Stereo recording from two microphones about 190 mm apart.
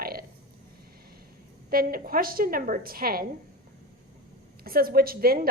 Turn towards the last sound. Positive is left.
turn(degrees=-50)  # may be behind; listen again after turning